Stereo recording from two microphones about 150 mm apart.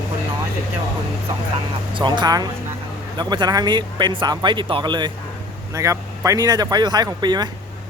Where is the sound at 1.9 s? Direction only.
30° right (ahead or behind).